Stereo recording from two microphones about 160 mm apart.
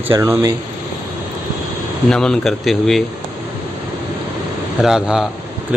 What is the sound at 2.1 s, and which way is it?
Speech, 5° left (ahead or behind).